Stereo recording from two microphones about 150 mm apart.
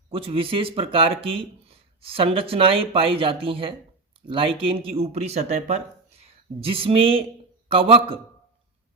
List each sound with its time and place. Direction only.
0.1 s speech: 40° right (ahead or behind)